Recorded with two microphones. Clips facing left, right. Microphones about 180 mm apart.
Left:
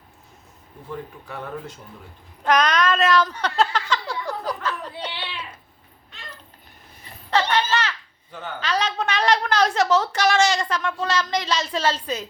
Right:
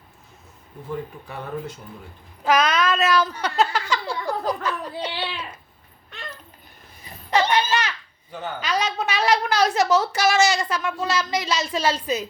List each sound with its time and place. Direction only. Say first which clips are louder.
2.4 s cat: even; 5° right (ahead or behind)
5.1 s speech: right 5 dB; 40° right (ahead or behind)
7.3 s a child's voice: right 1 dB; 15° right (ahead or behind)